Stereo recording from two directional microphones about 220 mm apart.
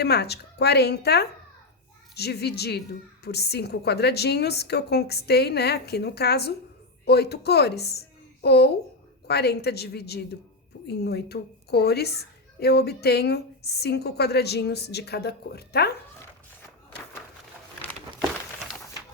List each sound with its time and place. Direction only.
0.0 s a woman's voice: 50° left (ahead or behind)